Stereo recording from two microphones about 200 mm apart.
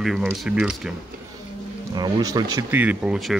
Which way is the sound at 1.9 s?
20° right (ahead or behind).